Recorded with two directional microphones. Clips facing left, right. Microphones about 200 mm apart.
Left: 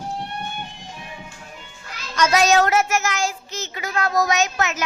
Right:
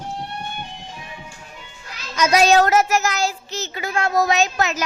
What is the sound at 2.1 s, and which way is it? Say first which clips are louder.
Speech: right 1 dB; 10° right (ahead or behind).